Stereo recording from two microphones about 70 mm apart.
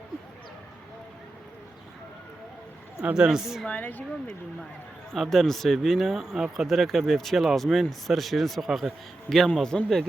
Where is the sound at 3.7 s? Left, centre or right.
Left.